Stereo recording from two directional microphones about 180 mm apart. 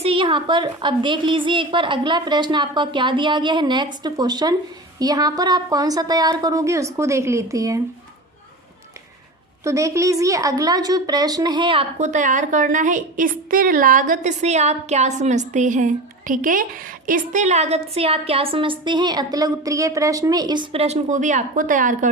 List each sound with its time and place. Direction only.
0.0 s a woman's voice: 30° right (ahead or behind)
9.6 s a woman's voice: 15° right (ahead or behind)
11.9 s a woman's voice: 40° right (ahead or behind)